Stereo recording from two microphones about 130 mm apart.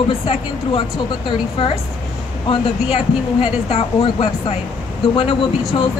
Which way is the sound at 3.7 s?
45° left (ahead or behind).